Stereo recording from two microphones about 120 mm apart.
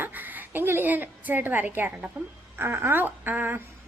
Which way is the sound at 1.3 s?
15° right (ahead or behind).